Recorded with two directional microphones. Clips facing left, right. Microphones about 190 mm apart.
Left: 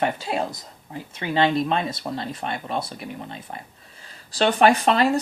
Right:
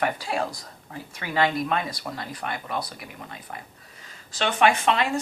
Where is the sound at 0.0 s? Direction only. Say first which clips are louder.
Left 2 dB; 25° left (ahead or behind).